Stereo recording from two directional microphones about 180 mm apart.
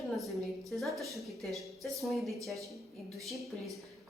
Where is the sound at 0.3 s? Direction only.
Centre (ahead or behind).